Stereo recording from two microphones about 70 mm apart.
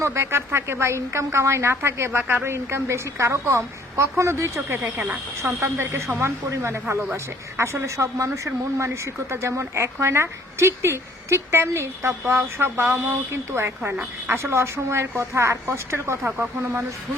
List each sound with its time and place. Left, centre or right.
0.0 s speech: right
4.8 s speech: centre
5.4 s speech: right